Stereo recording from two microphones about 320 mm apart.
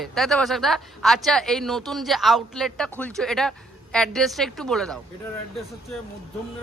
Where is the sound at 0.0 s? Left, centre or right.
Centre.